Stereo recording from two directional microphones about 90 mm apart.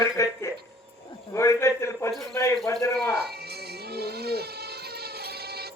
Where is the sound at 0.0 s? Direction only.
35° left (ahead or behind).